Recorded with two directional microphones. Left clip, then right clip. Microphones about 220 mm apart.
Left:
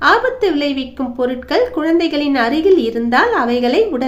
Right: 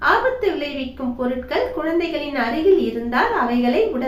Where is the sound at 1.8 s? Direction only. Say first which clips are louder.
Left 6 dB; 50° left (ahead or behind).